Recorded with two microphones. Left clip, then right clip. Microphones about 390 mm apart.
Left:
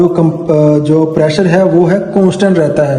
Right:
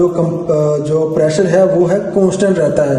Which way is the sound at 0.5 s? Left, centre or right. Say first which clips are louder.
Left 4 dB; left.